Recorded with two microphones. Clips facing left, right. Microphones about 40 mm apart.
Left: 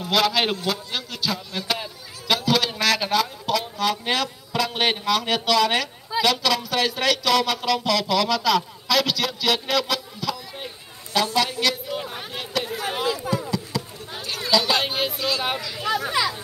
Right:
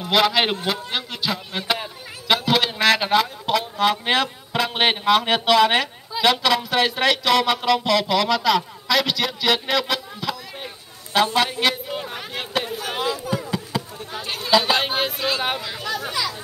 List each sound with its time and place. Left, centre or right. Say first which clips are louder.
0.0 s a man's voice: right 2 dB; centre
11.1 s music: right 3 dB; right
12.4 s a sound: right 1 dB; right
13.3 s a sound: even; right
14.5 s speech: right 3 dB; right
16.1 s speech: left 3 dB; left